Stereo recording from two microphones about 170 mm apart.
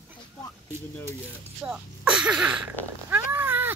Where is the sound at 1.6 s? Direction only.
5° right (ahead or behind).